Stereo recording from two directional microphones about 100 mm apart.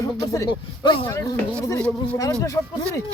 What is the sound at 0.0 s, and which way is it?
Speech, 40° left (ahead or behind).